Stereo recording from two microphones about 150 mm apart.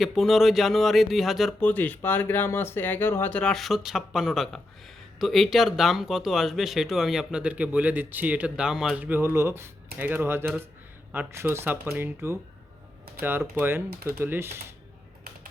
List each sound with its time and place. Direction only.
0.0 s speech: centre (ahead or behind)
1.6 s speech: 10° left (ahead or behind); by 14.5 s 15° right (ahead or behind)